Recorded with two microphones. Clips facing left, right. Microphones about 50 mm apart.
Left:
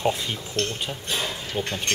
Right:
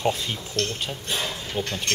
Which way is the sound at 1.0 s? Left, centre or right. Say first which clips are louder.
Even; centre.